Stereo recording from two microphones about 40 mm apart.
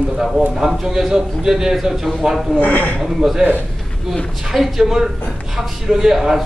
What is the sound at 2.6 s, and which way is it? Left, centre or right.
Speech, left.